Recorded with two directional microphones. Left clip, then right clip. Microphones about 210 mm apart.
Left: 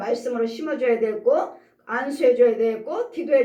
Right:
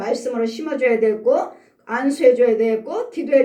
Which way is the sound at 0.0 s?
45° right (ahead or behind).